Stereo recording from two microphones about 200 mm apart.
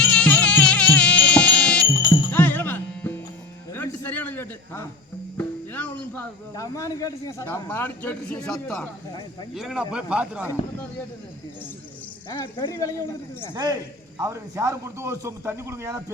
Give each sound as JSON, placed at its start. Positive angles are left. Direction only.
{"t": 0.0, "sound": "music", "side_deg": 5}
{"t": 1.9, "sound": "music", "side_deg": 15}
{"t": 3.7, "sound": "a sound", "side_deg": 10}
{"t": 5.4, "sound": "music", "side_deg": 10}
{"t": 6.5, "sound": "speech", "side_deg": 15}
{"t": 9.6, "sound": "speech", "side_deg": 0}
{"t": 13.5, "sound": "a man's voice", "side_deg": -20}